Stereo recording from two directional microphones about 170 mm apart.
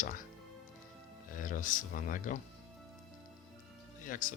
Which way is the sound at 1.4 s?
50° left (ahead or behind).